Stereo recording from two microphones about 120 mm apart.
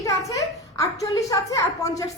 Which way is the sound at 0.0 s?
25° left (ahead or behind).